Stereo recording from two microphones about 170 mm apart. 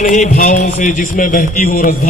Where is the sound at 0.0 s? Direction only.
50° left (ahead or behind).